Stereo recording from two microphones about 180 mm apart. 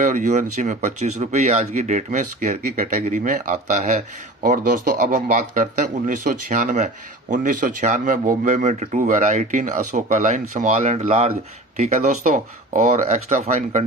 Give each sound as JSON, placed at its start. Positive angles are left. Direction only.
{"t": 0.0, "sound": "speech", "side_deg": -45}